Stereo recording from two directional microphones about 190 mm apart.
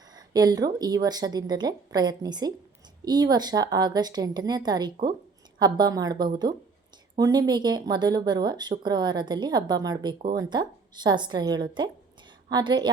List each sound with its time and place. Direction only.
0.1 s speech: 20° right (ahead or behind)